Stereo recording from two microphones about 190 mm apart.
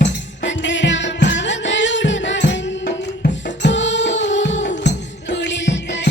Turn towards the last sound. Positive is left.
turn(degrees=70)  # may be behind; listen again after turning